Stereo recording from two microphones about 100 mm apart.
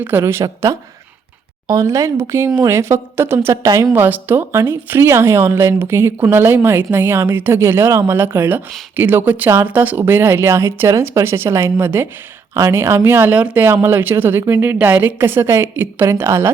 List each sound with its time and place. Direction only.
0.0 s a woman's voice: 20° right (ahead or behind)
3.9 s a woman's voice: 20° right (ahead or behind)